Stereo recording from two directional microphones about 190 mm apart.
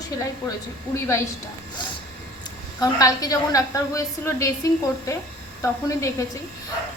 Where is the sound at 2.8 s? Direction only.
20° left (ahead or behind).